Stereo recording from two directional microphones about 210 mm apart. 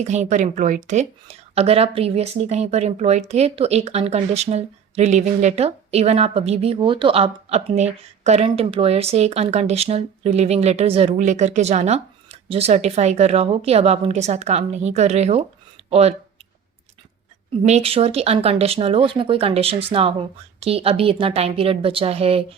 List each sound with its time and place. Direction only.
0.0 s a woman's voice: 35° right (ahead or behind)
17.6 s speech: 30° right (ahead or behind)